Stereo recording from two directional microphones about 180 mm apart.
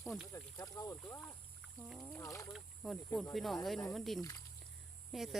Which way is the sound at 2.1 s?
20° left (ahead or behind).